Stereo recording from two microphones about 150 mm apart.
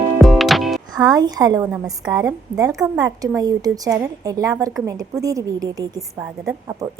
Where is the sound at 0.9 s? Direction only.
25° right (ahead or behind).